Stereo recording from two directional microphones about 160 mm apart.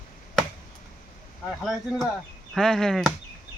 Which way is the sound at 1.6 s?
Centre (ahead or behind).